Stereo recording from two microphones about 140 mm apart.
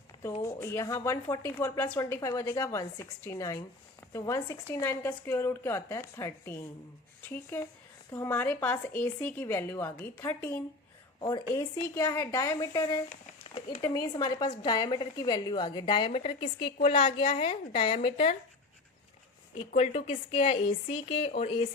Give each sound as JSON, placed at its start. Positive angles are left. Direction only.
{"t": 0.4, "sound": "a woman's voice", "side_deg": 20}
{"t": 11.2, "sound": "a woman's voice", "side_deg": 30}
{"t": 11.5, "sound": "a woman's voice", "side_deg": 20}
{"t": 13.4, "sound": "a sound", "side_deg": 40}
{"t": 13.9, "sound": "a woman's voice", "side_deg": 25}
{"t": 19.5, "sound": "a woman's voice", "side_deg": 50}